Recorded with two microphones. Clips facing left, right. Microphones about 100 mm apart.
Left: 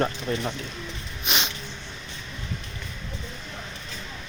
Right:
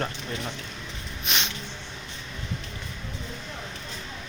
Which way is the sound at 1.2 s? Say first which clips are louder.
Left 2 dB; 10° left (ahead or behind).